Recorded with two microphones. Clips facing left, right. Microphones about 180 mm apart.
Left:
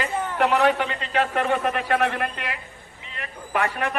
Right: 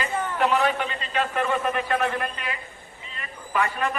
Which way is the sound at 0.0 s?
70° left (ahead or behind).